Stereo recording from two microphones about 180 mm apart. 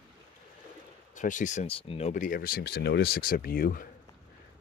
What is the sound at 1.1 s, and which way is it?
Speech, 45° left (ahead or behind).